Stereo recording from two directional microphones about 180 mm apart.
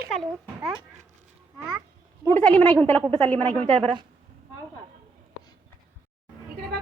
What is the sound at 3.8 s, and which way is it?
Speech, 25° right (ahead or behind).